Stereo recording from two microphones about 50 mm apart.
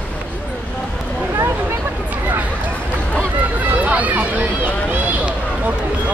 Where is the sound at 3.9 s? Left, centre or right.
Right.